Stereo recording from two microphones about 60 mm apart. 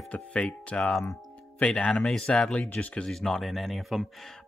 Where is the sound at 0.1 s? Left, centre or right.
Left.